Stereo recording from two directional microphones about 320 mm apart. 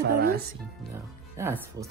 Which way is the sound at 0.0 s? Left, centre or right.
Right.